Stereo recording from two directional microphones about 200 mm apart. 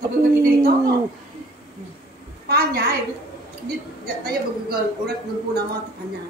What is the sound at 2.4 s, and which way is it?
Speech, 50° right (ahead or behind).